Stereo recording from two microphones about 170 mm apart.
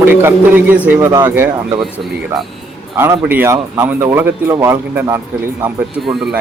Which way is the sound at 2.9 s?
15° right (ahead or behind).